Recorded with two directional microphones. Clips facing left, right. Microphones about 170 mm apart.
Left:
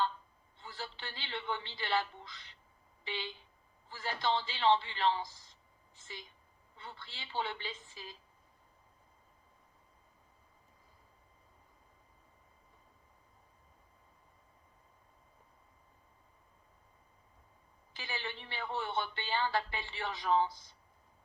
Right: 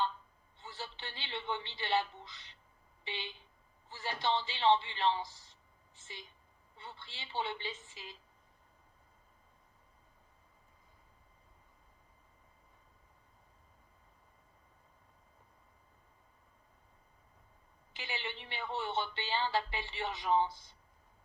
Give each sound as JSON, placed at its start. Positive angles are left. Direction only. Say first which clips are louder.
{"t": 0.6, "sound": "speech", "louder": "left 1 dB", "side_deg": -20}
{"t": 17.9, "sound": "speech", "louder": "even", "side_deg": -20}